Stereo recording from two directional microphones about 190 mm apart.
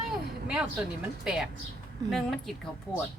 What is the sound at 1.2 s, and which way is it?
Speech, centre (ahead or behind).